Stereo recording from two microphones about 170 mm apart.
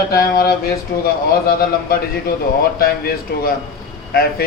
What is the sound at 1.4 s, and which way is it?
A man's voice, 60° left (ahead or behind).